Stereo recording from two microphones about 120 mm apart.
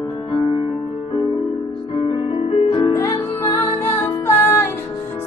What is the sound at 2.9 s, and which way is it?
Music, 30° left (ahead or behind).